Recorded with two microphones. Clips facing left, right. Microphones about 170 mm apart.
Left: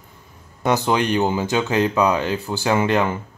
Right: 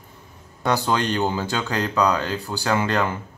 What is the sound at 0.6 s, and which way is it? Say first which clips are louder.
Speech: left 3 dB; 20° left (ahead or behind).